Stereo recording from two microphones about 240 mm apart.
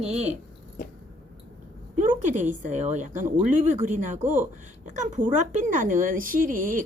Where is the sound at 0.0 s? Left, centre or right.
Right.